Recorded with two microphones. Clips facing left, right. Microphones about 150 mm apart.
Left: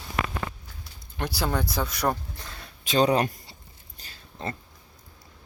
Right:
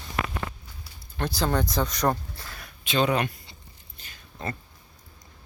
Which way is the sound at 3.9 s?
35° left (ahead or behind).